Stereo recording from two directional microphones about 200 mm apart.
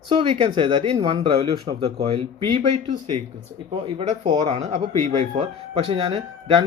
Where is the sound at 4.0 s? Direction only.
25° right (ahead or behind).